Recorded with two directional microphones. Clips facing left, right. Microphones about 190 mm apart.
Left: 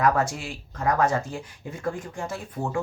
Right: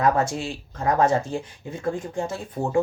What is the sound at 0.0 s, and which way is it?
Speech, 25° right (ahead or behind).